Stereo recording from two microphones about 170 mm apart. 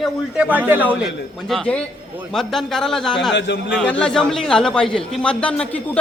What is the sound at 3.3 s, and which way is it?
Speech, 90° left.